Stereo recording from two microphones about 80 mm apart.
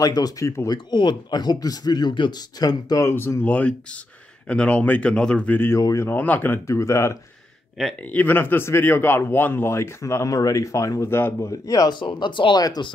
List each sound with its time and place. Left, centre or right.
0.0 s speech: left
0.7 s speech: left
2.6 s speech: left
3.0 s speech: left
3.4 s speech: centre
5.8 s speech: left
6.0 s speech: left
6.7 s speech: left
7.8 s speech: centre
8.1 s speech: left
11.1 s speech: left
11.9 s speech: left
12.5 s speech: left